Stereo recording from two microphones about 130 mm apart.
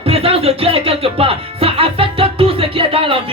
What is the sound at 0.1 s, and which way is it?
Speech, 50° right (ahead or behind).